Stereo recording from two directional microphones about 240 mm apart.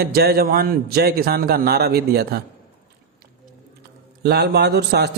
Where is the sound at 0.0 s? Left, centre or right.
Right.